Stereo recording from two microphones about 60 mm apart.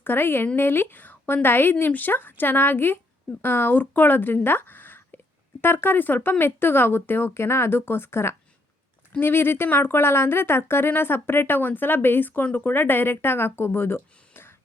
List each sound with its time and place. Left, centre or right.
0.0 s speech: left
4.4 s a sound: left
5.6 s speech: left
7.3 s speech: left